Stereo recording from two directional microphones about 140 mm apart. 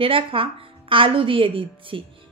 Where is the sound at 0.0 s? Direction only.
40° right (ahead or behind).